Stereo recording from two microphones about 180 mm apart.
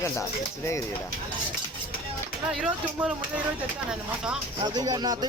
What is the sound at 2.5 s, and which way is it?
Speech, centre (ahead or behind).